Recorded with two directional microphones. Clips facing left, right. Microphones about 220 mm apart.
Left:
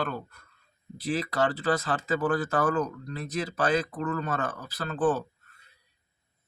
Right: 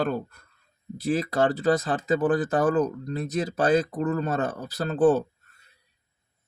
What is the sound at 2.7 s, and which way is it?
Speech, 30° right (ahead or behind).